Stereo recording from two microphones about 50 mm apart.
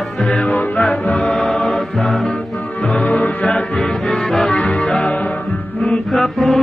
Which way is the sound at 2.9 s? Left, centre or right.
Left.